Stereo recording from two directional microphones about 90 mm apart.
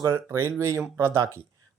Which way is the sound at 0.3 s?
30° right (ahead or behind).